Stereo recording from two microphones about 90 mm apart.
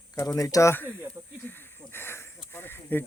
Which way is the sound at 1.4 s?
25° left (ahead or behind).